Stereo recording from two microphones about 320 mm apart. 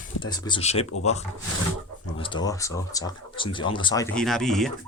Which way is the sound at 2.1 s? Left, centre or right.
Centre.